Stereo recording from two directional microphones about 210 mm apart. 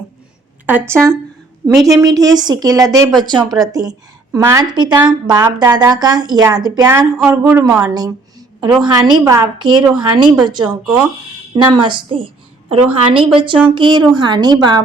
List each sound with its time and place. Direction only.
0.6 s a woman's voice: 10° right (ahead or behind)